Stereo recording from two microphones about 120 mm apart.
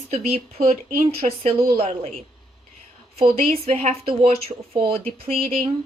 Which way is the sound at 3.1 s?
60° right (ahead or behind).